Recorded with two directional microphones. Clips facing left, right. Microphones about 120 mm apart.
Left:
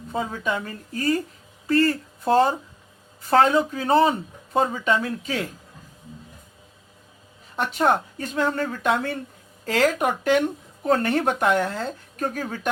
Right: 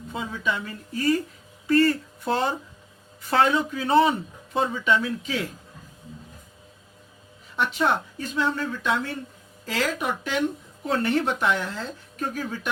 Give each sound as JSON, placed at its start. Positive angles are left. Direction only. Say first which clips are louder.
{"t": 0.1, "sound": "speech", "louder": "left 3 dB", "side_deg": 45}
{"t": 7.5, "sound": "speech", "louder": "left 2 dB", "side_deg": 45}